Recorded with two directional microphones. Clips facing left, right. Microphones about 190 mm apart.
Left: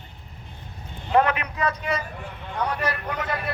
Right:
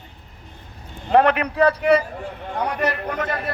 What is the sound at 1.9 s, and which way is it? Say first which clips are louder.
Speech: right 11 dB; 30° right (ahead or behind).